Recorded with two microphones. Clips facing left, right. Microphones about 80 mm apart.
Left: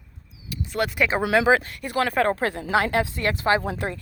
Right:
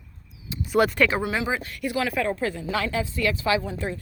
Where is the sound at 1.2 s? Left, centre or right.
Left.